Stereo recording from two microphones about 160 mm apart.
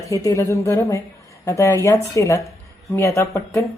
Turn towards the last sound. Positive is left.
turn(degrees=15)  # may be behind; listen again after turning